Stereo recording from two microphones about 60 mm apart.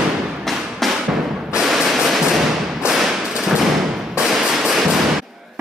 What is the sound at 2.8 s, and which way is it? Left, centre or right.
Thump, centre.